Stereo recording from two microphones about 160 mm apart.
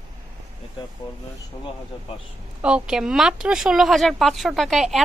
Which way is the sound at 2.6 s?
5° right (ahead or behind).